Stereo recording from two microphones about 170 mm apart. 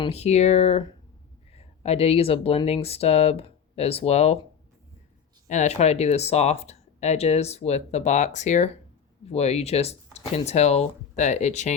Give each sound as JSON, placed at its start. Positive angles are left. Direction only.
{"t": 0.0, "sound": "speech", "side_deg": 40}
{"t": 5.5, "sound": "speech", "side_deg": 45}